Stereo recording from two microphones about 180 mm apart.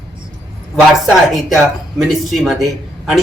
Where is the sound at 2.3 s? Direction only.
Centre (ahead or behind).